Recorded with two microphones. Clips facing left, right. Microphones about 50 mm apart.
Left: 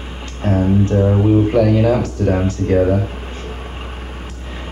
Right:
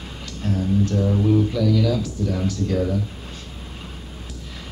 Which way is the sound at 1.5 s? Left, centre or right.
Left.